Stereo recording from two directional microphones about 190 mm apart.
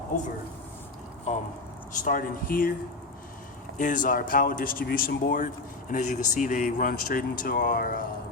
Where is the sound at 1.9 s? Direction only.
45° left (ahead or behind).